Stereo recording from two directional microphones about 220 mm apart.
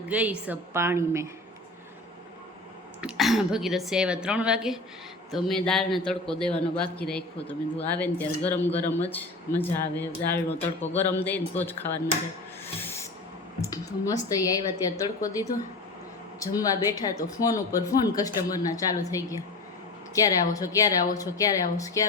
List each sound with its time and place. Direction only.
0.1 s a woman's voice: 5° right (ahead or behind)
3.0 s a man's voice: centre (ahead or behind)
12.8 s a sound: 10° left (ahead or behind)
13.6 s speech: 15° left (ahead or behind)